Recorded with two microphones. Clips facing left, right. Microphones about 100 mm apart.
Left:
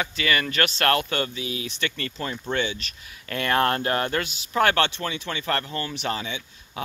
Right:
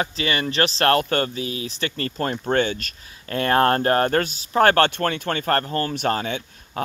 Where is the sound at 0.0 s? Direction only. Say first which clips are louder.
Right 1 dB; 30° right (ahead or behind); by 2.9 s 45° right (ahead or behind).